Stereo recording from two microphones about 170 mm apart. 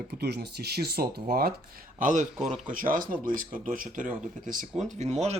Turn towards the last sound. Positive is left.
turn(degrees=-40)  # may be behind; listen again after turning